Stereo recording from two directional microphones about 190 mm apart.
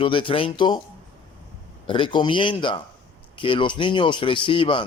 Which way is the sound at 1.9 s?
25° left (ahead or behind).